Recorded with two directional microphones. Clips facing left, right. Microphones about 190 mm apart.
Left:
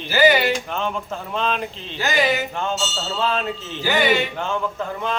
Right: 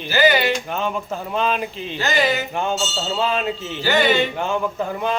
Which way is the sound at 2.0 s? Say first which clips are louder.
Even; 10° left (ahead or behind).